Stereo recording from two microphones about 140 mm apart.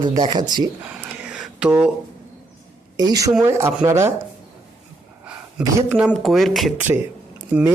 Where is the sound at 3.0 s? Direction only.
25° right (ahead or behind).